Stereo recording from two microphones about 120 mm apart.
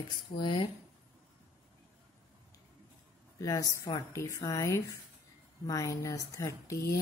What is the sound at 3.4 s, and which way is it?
Speech, 30° left (ahead or behind).